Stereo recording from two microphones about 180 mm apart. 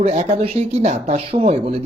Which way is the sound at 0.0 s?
35° right (ahead or behind).